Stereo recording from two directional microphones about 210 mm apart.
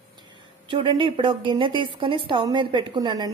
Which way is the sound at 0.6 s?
25° right (ahead or behind).